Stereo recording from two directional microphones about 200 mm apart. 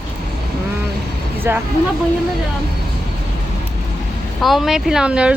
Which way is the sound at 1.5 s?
10° right (ahead or behind).